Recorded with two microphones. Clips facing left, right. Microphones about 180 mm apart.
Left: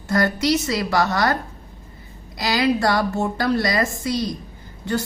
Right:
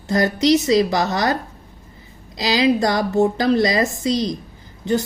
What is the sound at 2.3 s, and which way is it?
A woman's voice, 20° right (ahead or behind).